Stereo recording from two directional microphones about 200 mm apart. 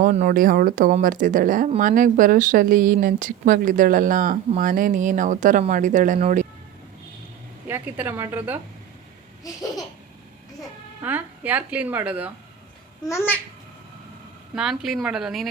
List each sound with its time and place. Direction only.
0.2 s speech: 40° right (ahead or behind)
7.7 s speech: 10° right (ahead or behind)
9.4 s laughter: 15° left (ahead or behind)
11.0 s speech: 10° right (ahead or behind)
13.1 s laughter: 10° left (ahead or behind)
14.5 s a woman's voice: centre (ahead or behind)